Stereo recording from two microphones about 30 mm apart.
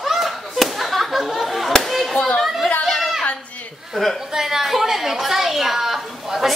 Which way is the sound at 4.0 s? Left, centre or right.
Left.